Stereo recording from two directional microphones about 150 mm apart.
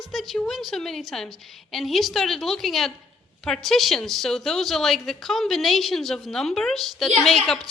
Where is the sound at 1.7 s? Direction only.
Centre (ahead or behind).